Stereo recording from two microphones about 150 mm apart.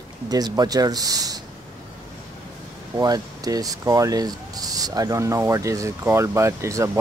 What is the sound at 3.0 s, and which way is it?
Speech, 25° right (ahead or behind).